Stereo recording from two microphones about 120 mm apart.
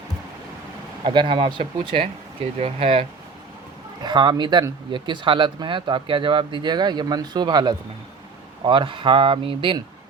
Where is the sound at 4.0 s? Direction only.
35° right (ahead or behind).